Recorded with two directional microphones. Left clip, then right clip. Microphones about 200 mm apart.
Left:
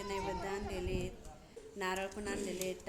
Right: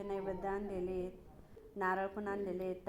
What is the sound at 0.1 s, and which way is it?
Speech, centre (ahead or behind).